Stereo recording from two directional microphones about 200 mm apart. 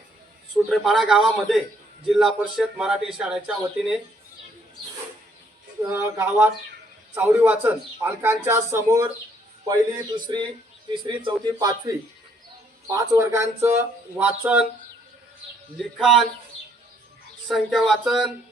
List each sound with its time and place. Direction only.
0.5 s speech: centre (ahead or behind)
5.8 s a man's voice: 15° right (ahead or behind)
16.0 s speech: centre (ahead or behind)
17.5 s speech: centre (ahead or behind)